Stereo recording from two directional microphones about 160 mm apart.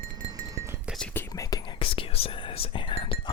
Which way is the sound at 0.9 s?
10° left (ahead or behind).